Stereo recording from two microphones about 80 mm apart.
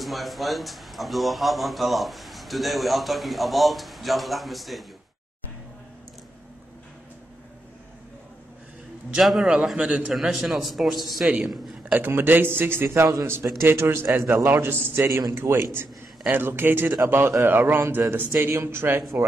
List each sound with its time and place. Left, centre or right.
0.0 s a man's voice: centre
9.2 s a man's voice: centre
9.8 s a man's voice: centre
10.1 s a man's voice: centre
11.9 s a man's voice: right